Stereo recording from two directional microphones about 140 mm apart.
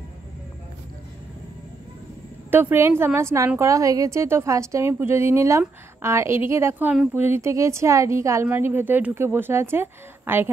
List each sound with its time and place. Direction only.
2.5 s a woman's voice: 15° right (ahead or behind)